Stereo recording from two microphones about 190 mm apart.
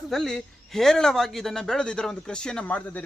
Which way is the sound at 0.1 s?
Centre (ahead or behind).